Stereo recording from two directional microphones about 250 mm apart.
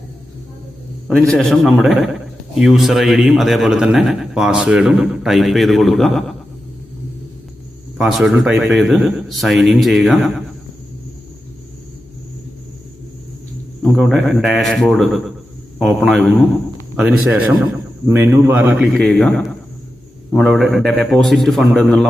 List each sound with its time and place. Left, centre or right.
1.3 s a man's voice: centre
7.9 s a man's voice: centre
13.8 s a man's voice: centre